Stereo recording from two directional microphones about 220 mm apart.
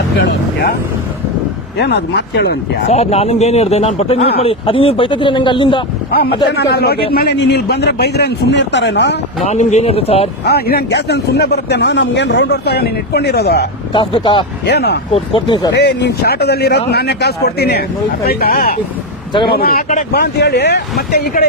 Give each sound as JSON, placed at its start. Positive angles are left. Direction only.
{"t": 0.2, "sound": "speech", "side_deg": 50}
{"t": 1.8, "sound": "a man's voice", "side_deg": 50}
{"t": 2.9, "sound": "speech", "side_deg": 30}
{"t": 6.1, "sound": "a man's voice", "side_deg": 45}
{"t": 9.5, "sound": "speech", "side_deg": 30}
{"t": 10.4, "sound": "a man's voice", "side_deg": 45}
{"t": 13.9, "sound": "speech", "side_deg": 20}
{"t": 14.7, "sound": "a man's voice", "side_deg": 50}
{"t": 15.1, "sound": "speech", "side_deg": 25}
{"t": 15.7, "sound": "a man's voice", "side_deg": 50}